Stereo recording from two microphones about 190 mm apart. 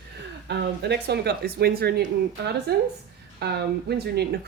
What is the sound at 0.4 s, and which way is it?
Speech, 65° right (ahead or behind).